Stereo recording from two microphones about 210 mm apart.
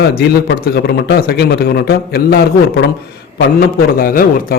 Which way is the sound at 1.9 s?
45° left (ahead or behind).